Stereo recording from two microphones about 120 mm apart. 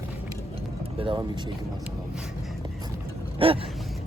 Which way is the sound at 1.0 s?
50° right (ahead or behind).